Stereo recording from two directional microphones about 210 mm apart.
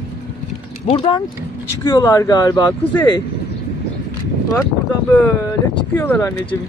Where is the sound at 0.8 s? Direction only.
25° left (ahead or behind).